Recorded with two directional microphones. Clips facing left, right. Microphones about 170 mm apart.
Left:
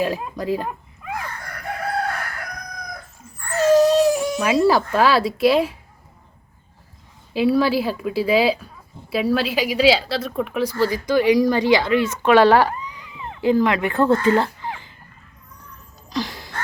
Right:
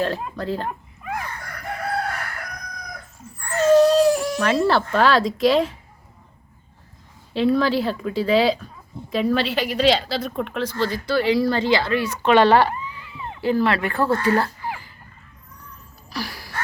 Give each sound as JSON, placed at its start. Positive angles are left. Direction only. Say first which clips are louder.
{"t": 0.0, "sound": "a woman's voice", "louder": "left 1 dB", "side_deg": 10}
{"t": 3.5, "sound": "baby cry", "louder": "even", "side_deg": 0}
{"t": 7.3, "sound": "a woman's voice", "louder": "left 1 dB", "side_deg": 5}
{"t": 12.2, "sound": "speech", "louder": "left 1 dB", "side_deg": 10}
{"t": 16.0, "sound": "a sound", "louder": "left 5 dB", "side_deg": 20}